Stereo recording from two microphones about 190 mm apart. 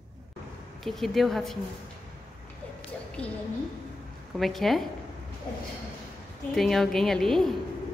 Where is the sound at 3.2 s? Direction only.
5° left (ahead or behind).